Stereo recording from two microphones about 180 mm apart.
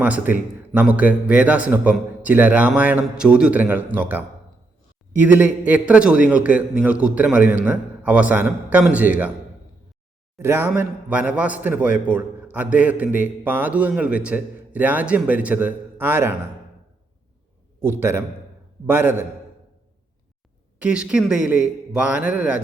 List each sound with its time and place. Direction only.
0.0 s a man's voice: 10° right (ahead or behind)
10.3 s a man's voice: 15° right (ahead or behind)
18.9 s a man's voice: 10° right (ahead or behind)
20.8 s a man's voice: 5° right (ahead or behind)